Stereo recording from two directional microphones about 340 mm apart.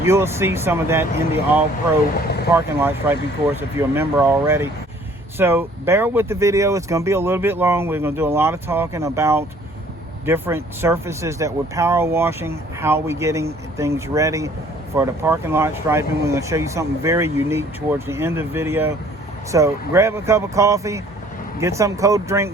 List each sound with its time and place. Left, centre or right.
0.0 s speech: centre
2.1 s speech: left
2.5 s speech: centre